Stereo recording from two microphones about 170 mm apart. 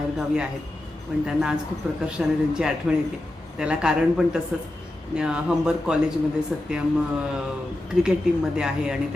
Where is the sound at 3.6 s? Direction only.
5° right (ahead or behind).